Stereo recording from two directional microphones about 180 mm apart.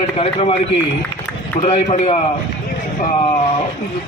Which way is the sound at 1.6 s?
40° left (ahead or behind).